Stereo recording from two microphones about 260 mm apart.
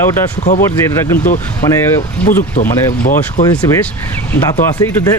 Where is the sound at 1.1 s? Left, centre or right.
Left.